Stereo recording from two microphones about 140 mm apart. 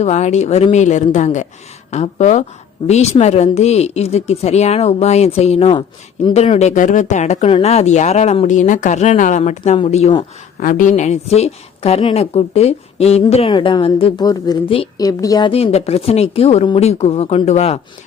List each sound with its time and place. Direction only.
0.0 s speech: 55° left (ahead or behind)
7.4 s speech: 45° left (ahead or behind)
10.6 s speech: 70° left (ahead or behind); by 13.2 s 50° left (ahead or behind)
13.5 s a woman's voice: 35° left (ahead or behind)
15.4 s speech: 45° left (ahead or behind)